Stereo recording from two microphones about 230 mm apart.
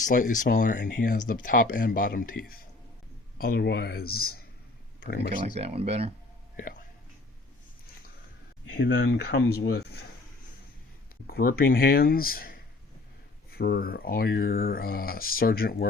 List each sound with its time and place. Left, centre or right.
0.0 s speech: left
5.5 s speech: right
6.6 s speech: left
8.7 s speech: left
9.6 s a sound: left
11.3 s speech: left